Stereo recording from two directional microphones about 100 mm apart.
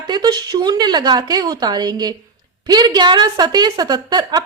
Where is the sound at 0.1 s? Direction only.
45° right (ahead or behind).